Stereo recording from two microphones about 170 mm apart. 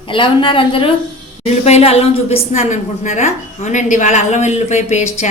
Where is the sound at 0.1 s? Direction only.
30° left (ahead or behind).